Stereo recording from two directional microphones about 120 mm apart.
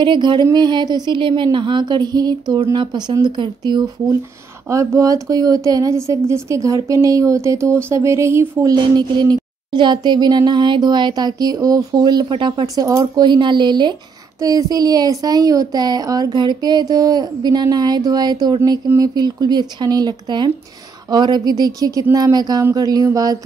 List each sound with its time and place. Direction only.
0.0 s speech: 40° right (ahead or behind)
4.6 s speech: 25° right (ahead or behind)
8.9 s speech: 35° right (ahead or behind)